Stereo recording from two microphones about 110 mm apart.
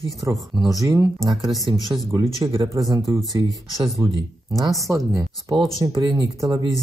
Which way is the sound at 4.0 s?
35° right (ahead or behind).